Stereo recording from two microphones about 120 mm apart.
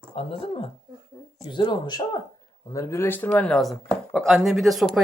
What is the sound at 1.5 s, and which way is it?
Speech, 40° left (ahead or behind).